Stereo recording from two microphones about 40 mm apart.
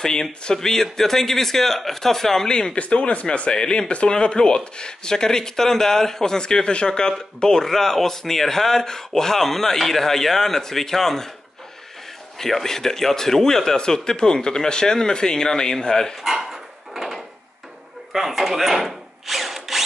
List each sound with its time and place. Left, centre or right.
0.0 s speech: centre
2.4 s speech: left
12.4 s speech: centre
16.3 s a sound: centre
18.1 s drill: centre